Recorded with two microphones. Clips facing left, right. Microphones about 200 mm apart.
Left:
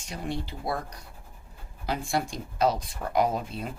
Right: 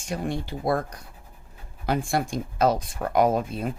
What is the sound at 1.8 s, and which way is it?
Speech, 50° right (ahead or behind).